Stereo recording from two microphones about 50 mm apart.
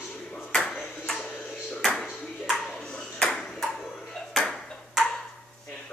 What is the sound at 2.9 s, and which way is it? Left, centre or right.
Ping, centre.